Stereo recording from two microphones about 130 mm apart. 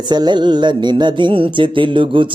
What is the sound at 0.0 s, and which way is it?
Mantra, 35° right (ahead or behind).